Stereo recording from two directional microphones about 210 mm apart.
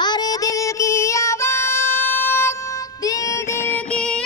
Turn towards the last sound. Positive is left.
turn(degrees=5)  # may be behind; listen again after turning